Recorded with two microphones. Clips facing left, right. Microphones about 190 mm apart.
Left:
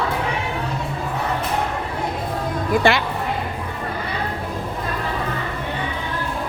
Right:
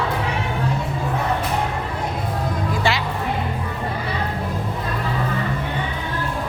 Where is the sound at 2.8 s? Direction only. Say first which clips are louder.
Left 4 dB; 55° left (ahead or behind).